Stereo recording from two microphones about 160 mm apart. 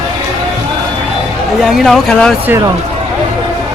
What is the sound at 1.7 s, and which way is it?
Speech, centre (ahead or behind).